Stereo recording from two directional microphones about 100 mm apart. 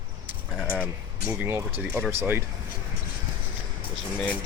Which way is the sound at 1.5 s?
25° right (ahead or behind).